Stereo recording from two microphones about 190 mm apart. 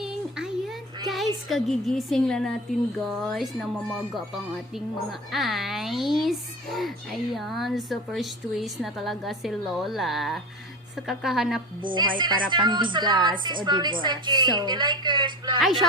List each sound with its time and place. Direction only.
0.0 s a sound: 5° right (ahead or behind)
1.1 s music: centre (ahead or behind)
3.0 s a child's voice: centre (ahead or behind)
11.8 s a woman's voice: 25° right (ahead or behind)